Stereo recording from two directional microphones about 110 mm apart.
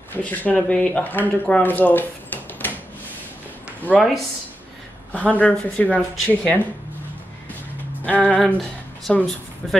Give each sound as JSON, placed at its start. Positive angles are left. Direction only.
{"t": 0.1, "sound": "speech", "side_deg": 15}
{"t": 3.9, "sound": "speech", "side_deg": 15}
{"t": 5.1, "sound": "speech", "side_deg": 10}
{"t": 8.0, "sound": "speech", "side_deg": 15}